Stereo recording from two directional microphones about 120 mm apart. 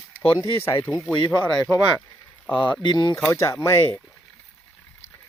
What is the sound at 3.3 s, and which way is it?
Speech, 25° left (ahead or behind).